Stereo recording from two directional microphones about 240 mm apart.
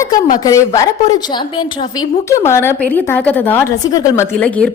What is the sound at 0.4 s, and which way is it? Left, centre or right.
A woman's voice, centre.